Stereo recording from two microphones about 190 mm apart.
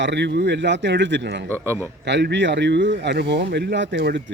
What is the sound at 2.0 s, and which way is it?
Speech, 65° right (ahead or behind).